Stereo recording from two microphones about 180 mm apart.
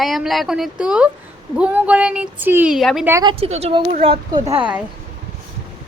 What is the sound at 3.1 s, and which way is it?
Speech, 15° right (ahead or behind).